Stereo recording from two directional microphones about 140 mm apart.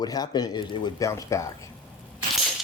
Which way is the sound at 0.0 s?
30° left (ahead or behind).